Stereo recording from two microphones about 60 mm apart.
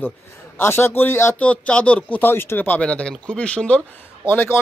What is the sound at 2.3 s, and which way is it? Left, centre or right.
Speech, left.